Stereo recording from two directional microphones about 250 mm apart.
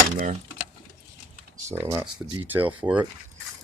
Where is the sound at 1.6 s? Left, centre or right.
Centre.